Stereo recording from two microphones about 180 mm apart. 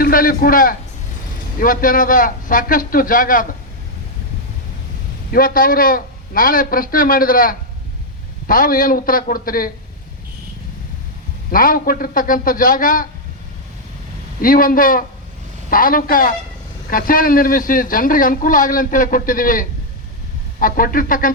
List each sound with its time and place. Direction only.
0.0 s a man's voice: 50° left (ahead or behind)
5.3 s speech: 55° left (ahead or behind)
11.5 s speech: 50° left (ahead or behind)
14.4 s speech: 50° left (ahead or behind)